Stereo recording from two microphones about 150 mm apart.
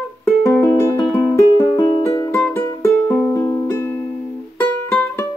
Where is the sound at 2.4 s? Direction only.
10° left (ahead or behind).